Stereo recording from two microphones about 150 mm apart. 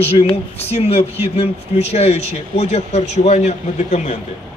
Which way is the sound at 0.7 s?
40° left (ahead or behind).